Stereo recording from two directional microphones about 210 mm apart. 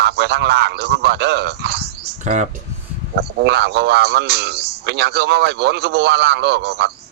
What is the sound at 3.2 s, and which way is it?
A man's voice, 50° right (ahead or behind).